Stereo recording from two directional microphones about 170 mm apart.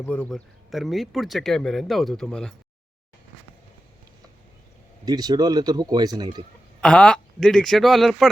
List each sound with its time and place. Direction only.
0.0 s speech: 10° left (ahead or behind)
5.0 s speech: 25° right (ahead or behind)
6.8 s speech: 5° left (ahead or behind)